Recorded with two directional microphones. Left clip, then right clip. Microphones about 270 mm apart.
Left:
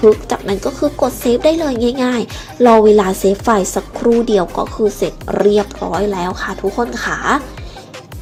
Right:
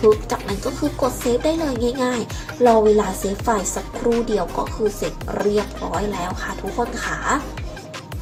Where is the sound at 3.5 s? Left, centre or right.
Left.